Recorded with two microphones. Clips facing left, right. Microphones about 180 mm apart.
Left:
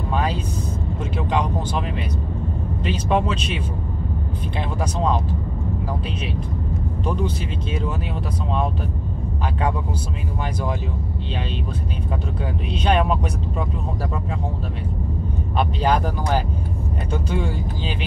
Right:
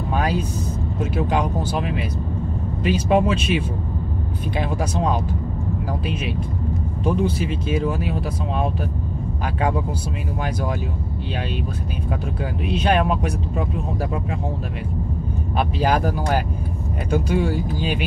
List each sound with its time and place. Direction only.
0.1 s vehicle: 10° right (ahead or behind)
1.1 s speech: 10° right (ahead or behind)
7.1 s speech: 10° right (ahead or behind)
12.6 s speech: 10° right (ahead or behind)
15.5 s speech: 10° right (ahead or behind)
17.1 s speech: 10° right (ahead or behind)